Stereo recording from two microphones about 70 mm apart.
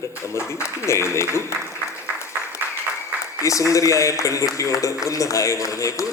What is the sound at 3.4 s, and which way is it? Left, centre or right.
A man's voice, left.